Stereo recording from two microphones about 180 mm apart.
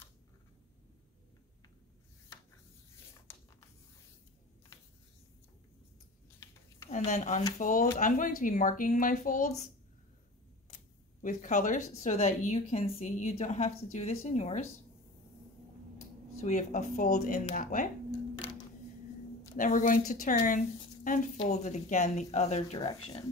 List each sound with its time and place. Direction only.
6.9 s speech: 40° left (ahead or behind)
11.2 s a woman's voice: 45° left (ahead or behind)
16.3 s speech: 40° left (ahead or behind)
19.5 s a woman's voice: 45° left (ahead or behind); by 23.2 s 30° left (ahead or behind)